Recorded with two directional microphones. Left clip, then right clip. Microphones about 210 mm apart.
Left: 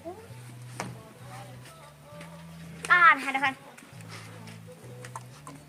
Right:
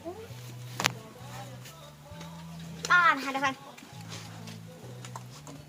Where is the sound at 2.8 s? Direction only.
30° left (ahead or behind).